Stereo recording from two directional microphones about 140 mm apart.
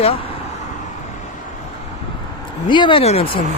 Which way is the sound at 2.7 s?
35° left (ahead or behind).